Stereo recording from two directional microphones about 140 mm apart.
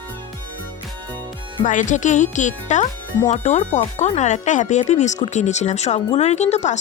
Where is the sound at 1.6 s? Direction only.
65° left (ahead or behind).